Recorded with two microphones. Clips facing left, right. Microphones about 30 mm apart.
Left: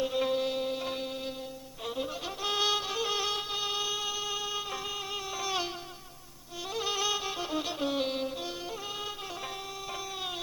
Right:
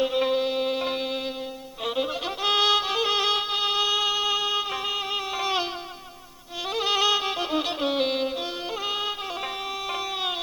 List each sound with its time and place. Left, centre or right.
0.0 s music: right
6.7 s music: right
8.9 s music: right
9.9 s a sound: right